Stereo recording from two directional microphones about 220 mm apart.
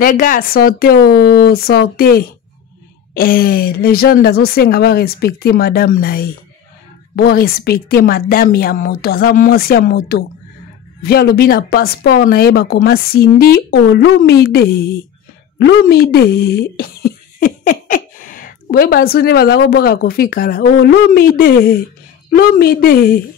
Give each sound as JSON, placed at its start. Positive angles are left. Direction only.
{"t": 0.0, "sound": "speech", "side_deg": 40}